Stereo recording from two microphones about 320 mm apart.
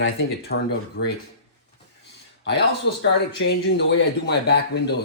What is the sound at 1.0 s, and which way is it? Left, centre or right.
Speech, left.